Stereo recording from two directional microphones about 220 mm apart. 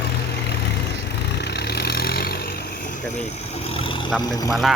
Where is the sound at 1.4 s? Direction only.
50° left (ahead or behind).